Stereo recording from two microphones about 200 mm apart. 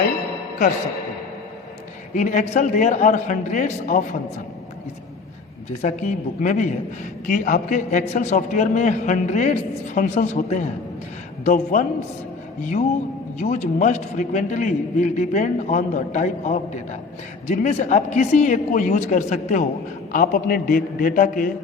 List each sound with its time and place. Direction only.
2.1 s a man's voice: 40° left (ahead or behind)
5.8 s a man's voice: 35° left (ahead or behind)
13.4 s a man's voice: 40° left (ahead or behind)